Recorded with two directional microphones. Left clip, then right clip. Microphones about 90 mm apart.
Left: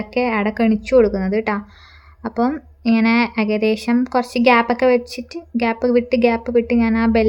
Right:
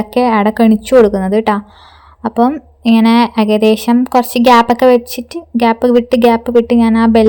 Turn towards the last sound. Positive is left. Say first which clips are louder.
# right 7 dB
turn(degrees=-35)  # may be behind; listen again after turning